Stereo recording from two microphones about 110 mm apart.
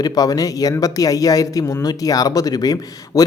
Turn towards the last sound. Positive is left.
turn(degrees=35)  # may be behind; listen again after turning